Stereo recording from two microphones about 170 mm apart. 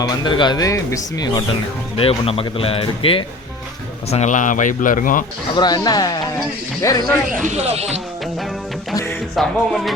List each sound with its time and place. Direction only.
0.0 s speech: 25° left (ahead or behind)
2.0 s speech: 35° left (ahead or behind)
4.1 s speech: 45° left (ahead or behind)
5.5 s speech: 25° left (ahead or behind)
7.4 s speech: 40° right (ahead or behind)
9.3 s music: centre (ahead or behind)